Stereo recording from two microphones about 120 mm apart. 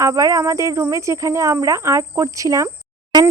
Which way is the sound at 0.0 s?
25° right (ahead or behind).